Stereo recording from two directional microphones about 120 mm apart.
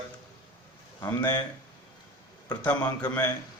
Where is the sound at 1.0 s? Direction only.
15° left (ahead or behind).